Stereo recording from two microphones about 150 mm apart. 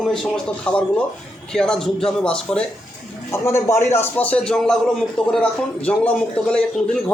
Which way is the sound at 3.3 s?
15° left (ahead or behind).